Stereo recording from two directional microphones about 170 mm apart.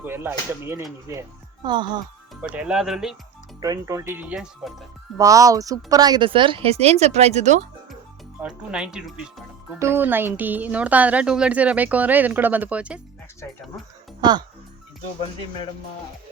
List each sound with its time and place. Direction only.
0.0 s a woman's voice: 15° right (ahead or behind)
2.3 s speech: 5° right (ahead or behind)
3.6 s speech: 20° right (ahead or behind)
5.1 s a woman's voice: 20° right (ahead or behind); by 7.6 s 45° right (ahead or behind)
8.4 s speech: 5° right (ahead or behind)
9.7 s speech: 15° right (ahead or behind)
14.2 s speech: 25° right (ahead or behind)